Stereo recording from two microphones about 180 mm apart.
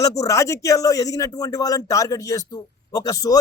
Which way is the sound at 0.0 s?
20° left (ahead or behind).